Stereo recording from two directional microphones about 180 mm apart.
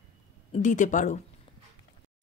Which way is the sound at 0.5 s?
45° left (ahead or behind).